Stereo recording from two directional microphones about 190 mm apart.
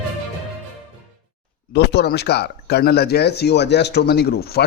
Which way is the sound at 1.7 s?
60° left (ahead or behind).